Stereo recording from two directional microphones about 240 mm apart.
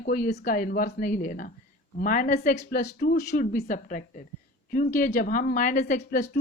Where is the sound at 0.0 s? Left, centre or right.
Left.